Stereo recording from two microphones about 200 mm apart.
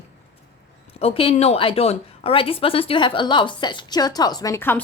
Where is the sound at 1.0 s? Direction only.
30° left (ahead or behind); by 4.8 s 10° left (ahead or behind).